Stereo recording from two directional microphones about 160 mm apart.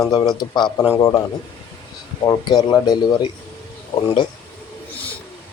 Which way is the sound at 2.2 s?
25° left (ahead or behind).